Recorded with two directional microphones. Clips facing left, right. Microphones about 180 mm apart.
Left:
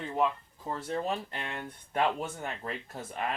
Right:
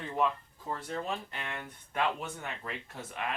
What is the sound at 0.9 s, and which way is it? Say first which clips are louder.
Speech: left 6 dB; 35° left (ahead or behind).